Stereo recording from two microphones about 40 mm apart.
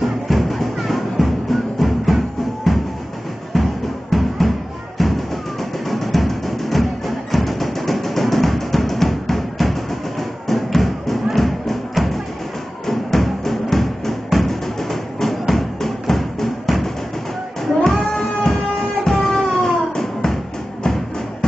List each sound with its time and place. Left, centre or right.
0.0 s music: centre
18.1 s music: centre